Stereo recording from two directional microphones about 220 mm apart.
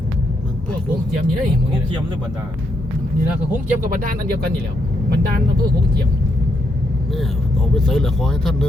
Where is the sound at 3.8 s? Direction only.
40° right (ahead or behind).